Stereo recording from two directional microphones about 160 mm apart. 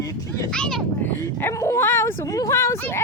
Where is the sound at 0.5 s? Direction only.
5° left (ahead or behind).